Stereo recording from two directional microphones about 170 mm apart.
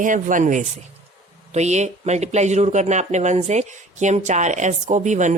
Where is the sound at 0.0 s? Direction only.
50° right (ahead or behind).